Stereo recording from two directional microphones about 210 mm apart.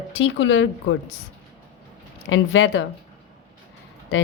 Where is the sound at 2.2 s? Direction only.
65° left (ahead or behind).